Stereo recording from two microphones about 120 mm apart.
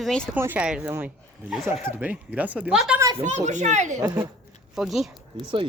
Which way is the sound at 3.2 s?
80° right.